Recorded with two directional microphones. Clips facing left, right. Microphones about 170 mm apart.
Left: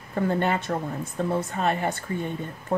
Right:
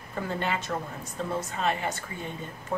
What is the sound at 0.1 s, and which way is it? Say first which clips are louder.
Speech: left 6 dB; 50° left (ahead or behind).